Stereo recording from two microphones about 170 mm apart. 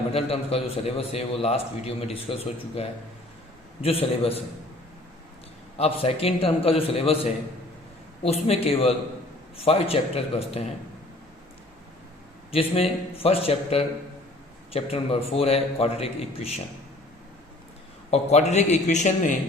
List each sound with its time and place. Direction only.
0.1 s a man's voice: 35° left (ahead or behind)
3.8 s a man's voice: 35° left (ahead or behind)
5.7 s a man's voice: 35° left (ahead or behind)
8.2 s a man's voice: 35° left (ahead or behind)
12.5 s a man's voice: 35° left (ahead or behind)
18.1 s a man's voice: 40° left (ahead or behind)